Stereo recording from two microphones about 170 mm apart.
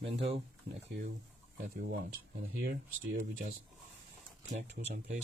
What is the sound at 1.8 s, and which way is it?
Speech, 65° right (ahead or behind).